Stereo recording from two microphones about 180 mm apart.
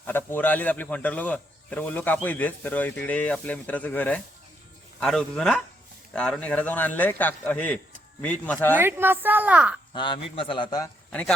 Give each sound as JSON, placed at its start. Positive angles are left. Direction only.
{"t": 0.0, "sound": "speech", "side_deg": 10}
{"t": 8.8, "sound": "a woman's voice", "side_deg": -10}
{"t": 9.9, "sound": "a man's voice", "side_deg": 25}
{"t": 11.1, "sound": "speech", "side_deg": 5}